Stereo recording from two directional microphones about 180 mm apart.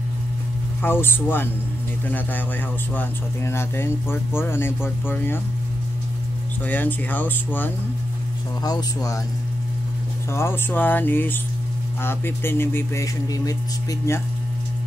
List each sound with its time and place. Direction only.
0.8 s speech: 10° left (ahead or behind)
6.6 s speech: 10° left (ahead or behind)
10.3 s speech: 15° left (ahead or behind)